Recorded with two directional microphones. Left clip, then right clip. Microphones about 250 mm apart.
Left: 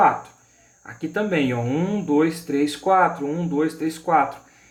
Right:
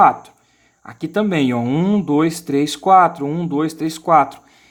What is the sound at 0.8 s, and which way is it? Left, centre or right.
Speech, right.